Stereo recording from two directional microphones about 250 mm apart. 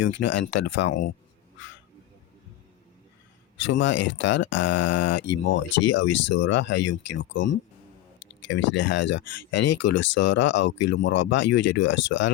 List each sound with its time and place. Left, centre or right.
0.0 s speech: left
3.6 s speech: left